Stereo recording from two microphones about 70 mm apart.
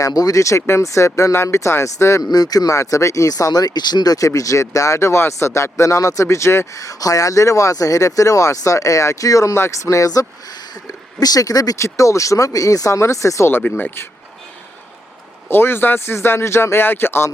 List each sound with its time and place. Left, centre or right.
0.0 s speech: left
2.3 s speech: left
4.3 s speech: left
6.7 s speech: left
9.6 s speech: left
11.8 s speech: left
13.6 s speech: left
15.4 s speech: left